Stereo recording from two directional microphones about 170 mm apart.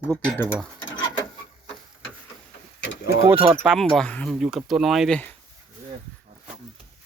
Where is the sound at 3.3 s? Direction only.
10° right (ahead or behind).